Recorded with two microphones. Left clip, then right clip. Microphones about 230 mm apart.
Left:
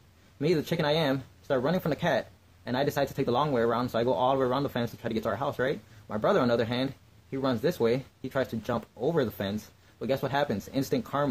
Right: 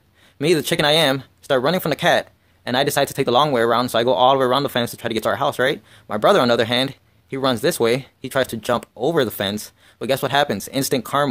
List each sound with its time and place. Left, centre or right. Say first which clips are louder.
0.4 s speech: right 10 dB; right